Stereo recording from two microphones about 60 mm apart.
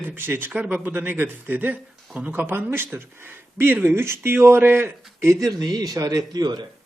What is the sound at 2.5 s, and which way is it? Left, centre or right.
Speech, right.